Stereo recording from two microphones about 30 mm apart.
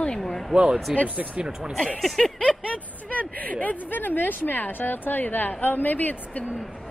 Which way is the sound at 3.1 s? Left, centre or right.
Left.